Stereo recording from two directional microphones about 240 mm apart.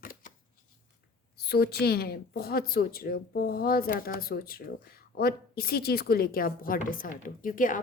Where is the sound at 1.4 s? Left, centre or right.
Left.